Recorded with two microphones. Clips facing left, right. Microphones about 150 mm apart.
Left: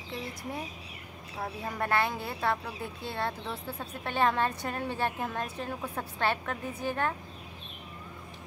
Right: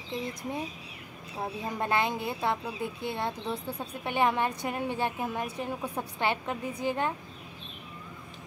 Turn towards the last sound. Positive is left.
turn(degrees=-15)  # may be behind; listen again after turning